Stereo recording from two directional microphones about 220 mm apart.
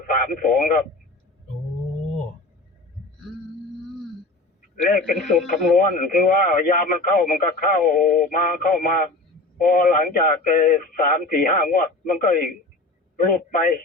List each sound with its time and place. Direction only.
0.0 s speech: 40° left (ahead or behind)
5.4 s a man's voice: centre (ahead or behind)
5.7 s speech: 40° left (ahead or behind)